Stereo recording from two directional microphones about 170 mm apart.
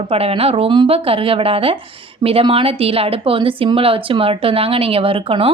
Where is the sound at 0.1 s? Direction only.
35° right (ahead or behind).